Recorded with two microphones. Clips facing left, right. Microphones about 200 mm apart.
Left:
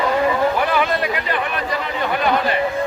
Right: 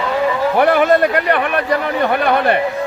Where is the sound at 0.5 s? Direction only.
60° right (ahead or behind).